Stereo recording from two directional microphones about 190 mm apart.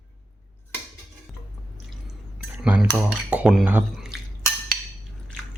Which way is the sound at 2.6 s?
5° right (ahead or behind).